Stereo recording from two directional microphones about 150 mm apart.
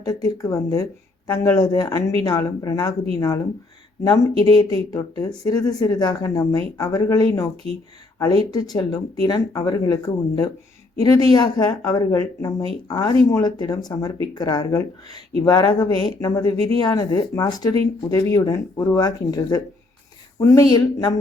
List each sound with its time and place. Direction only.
0.0 s speech: 25° left (ahead or behind)
7.5 s speech: 40° right (ahead or behind)
8.4 s speech: 25° left (ahead or behind)
11.0 s speech: 25° left (ahead or behind)